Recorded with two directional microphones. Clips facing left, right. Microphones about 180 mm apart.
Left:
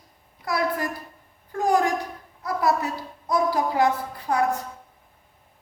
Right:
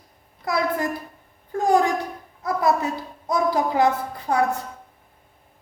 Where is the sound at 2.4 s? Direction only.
20° right (ahead or behind).